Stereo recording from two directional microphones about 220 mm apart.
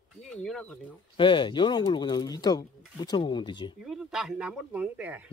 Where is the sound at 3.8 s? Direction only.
Centre (ahead or behind).